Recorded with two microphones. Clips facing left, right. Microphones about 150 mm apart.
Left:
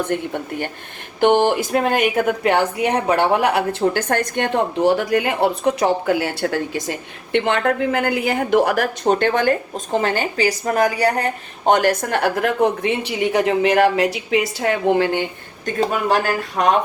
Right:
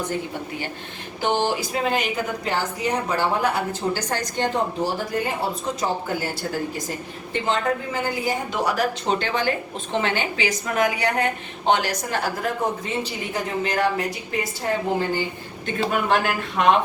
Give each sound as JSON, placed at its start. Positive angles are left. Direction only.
{"t": 0.1, "sound": "a woman's voice", "side_deg": 60}
{"t": 15.6, "sound": "speech", "side_deg": 40}